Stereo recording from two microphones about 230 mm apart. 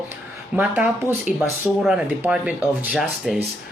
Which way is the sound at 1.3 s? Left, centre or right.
Left.